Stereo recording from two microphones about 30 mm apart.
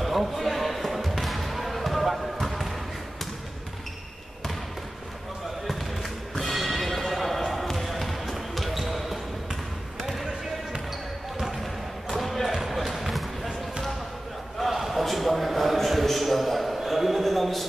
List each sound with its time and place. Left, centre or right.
0.0 s basketball bounce: centre
5.7 s basketball bounce: centre
9.5 s basketball bounce: centre
11.6 s basketball bounce: centre
14.6 s a sound: centre